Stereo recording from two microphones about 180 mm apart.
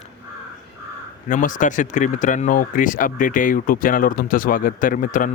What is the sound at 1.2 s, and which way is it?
Speech, 45° left (ahead or behind).